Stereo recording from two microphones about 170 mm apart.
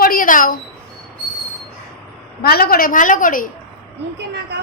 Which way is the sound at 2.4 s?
65° left (ahead or behind).